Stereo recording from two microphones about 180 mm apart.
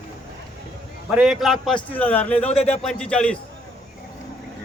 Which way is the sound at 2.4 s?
35° left (ahead or behind).